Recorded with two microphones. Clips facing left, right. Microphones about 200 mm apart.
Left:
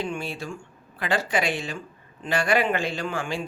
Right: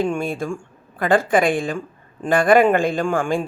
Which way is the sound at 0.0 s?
50° right (ahead or behind).